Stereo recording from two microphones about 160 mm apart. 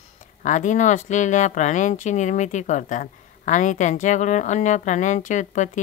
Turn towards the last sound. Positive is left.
turn(degrees=50)  # may be behind; listen again after turning